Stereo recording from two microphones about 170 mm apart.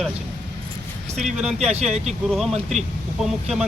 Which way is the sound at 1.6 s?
40° right (ahead or behind).